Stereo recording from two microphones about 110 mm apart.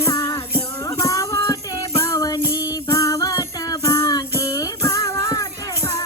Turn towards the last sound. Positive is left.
turn(degrees=25)  # may be behind; listen again after turning